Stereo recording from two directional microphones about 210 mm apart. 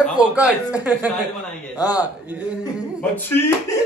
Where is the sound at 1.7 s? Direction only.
20° left (ahead or behind).